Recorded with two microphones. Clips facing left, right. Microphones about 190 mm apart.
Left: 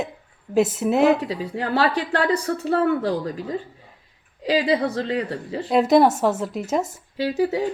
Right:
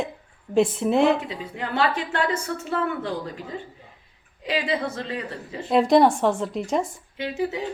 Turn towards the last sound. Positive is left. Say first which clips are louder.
# left 5 dB
turn(degrees=35)  # may be behind; listen again after turning